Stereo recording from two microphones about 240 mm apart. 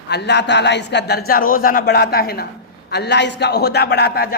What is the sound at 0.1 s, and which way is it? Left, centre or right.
A man's voice, left.